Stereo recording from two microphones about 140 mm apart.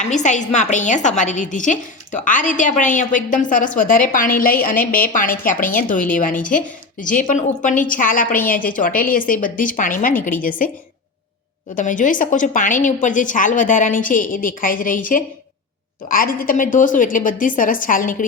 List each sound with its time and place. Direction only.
0.0 s a woman's voice: 60° left (ahead or behind)
11.8 s a woman's voice: 65° left (ahead or behind)
16.0 s a woman's voice: 90° left; by 18.3 s 70° left (ahead or behind)